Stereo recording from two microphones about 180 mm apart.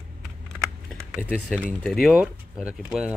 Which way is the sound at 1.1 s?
10° right (ahead or behind).